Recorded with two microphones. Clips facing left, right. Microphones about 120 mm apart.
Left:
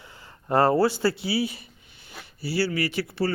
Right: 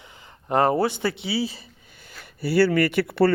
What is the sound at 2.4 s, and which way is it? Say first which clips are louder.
Speech: right 7 dB; 55° right (ahead or behind).